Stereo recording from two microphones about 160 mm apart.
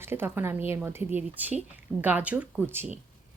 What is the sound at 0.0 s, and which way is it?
A woman's voice, 15° right (ahead or behind).